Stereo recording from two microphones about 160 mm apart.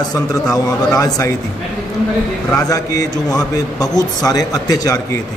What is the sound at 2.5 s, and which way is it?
A man's voice, 20° left (ahead or behind).